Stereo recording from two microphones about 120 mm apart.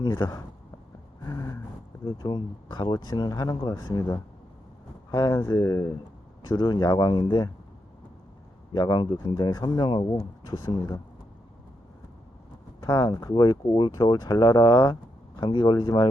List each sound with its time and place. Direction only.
0.0 s speech: 35° left (ahead or behind)
1.2 s a sound: 30° left (ahead or behind)
2.0 s speech: 35° left (ahead or behind)
5.1 s speech: 35° left (ahead or behind)
8.7 s speech: 35° left (ahead or behind)
12.8 s speech: 35° left (ahead or behind)